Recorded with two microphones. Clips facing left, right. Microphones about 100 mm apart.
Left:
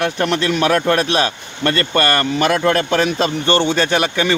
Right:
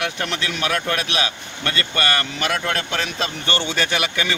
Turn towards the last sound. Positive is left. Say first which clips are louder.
# left 7 dB
turn(degrees=35)  # may be behind; listen again after turning